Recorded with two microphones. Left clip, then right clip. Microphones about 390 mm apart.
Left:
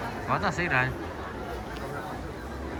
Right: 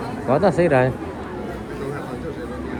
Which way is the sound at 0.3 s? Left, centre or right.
Centre.